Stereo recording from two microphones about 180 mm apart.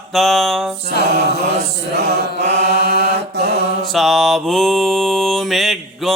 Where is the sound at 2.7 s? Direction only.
60° right (ahead or behind).